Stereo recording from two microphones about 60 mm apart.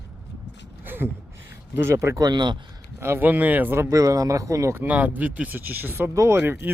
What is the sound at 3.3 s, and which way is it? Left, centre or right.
Speech, right.